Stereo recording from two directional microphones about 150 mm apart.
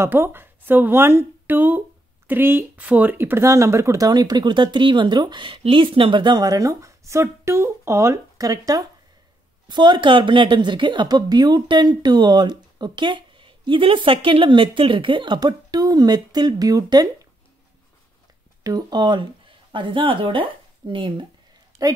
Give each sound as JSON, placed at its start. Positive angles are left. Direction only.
{"t": 0.0, "sound": "a woman's voice", "side_deg": -15}
{"t": 18.6, "sound": "speech", "side_deg": -25}